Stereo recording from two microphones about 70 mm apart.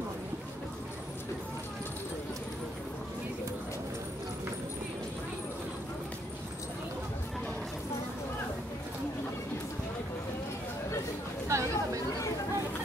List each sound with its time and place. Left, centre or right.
11.4 s chatter: right